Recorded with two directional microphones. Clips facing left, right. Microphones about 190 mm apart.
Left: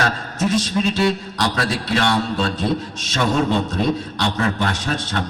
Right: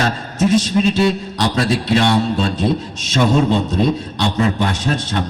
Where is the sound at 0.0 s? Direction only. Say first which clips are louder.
Right 4 dB; 20° right (ahead or behind).